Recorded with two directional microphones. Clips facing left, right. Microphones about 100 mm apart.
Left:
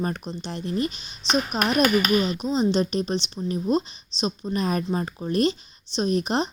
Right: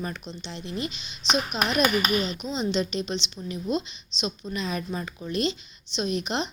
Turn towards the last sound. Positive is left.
turn(degrees=40)  # may be behind; listen again after turning